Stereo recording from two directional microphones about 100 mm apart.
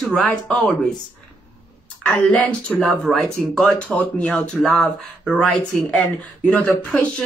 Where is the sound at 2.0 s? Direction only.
15° left (ahead or behind).